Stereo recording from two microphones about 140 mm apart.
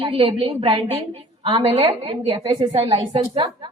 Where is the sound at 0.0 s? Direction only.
40° right (ahead or behind).